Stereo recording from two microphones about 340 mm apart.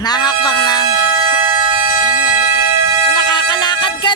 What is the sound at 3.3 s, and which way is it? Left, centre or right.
Music, centre.